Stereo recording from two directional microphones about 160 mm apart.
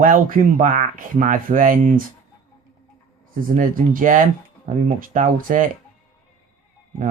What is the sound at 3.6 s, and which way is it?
Speech, 55° right (ahead or behind).